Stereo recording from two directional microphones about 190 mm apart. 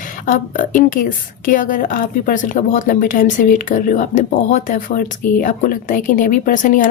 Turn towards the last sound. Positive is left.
turn(degrees=45)  # may be behind; listen again after turning